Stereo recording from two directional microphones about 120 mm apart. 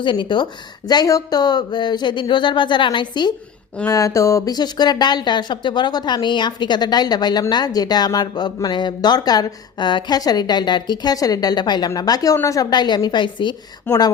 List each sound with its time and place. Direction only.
0.0 s speech: 45° left (ahead or behind)
0.9 s speech: 30° left (ahead or behind)
3.8 s speech: 25° left (ahead or behind)
13.9 s speech: 15° left (ahead or behind)